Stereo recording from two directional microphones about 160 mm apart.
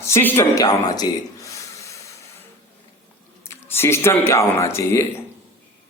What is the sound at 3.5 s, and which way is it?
A man's voice, 15° left (ahead or behind).